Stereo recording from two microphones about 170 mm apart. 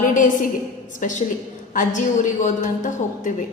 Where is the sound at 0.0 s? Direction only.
50° left (ahead or behind).